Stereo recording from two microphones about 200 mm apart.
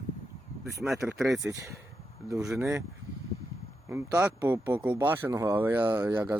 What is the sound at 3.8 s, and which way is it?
Speech, 10° right (ahead or behind).